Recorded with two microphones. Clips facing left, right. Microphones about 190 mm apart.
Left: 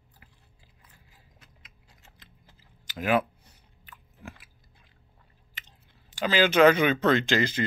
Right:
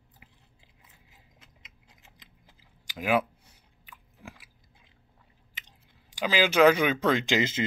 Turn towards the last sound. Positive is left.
turn(degrees=-20)  # may be behind; listen again after turning